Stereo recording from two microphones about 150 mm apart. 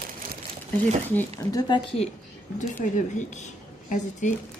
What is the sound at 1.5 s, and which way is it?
Speech, 30° left (ahead or behind).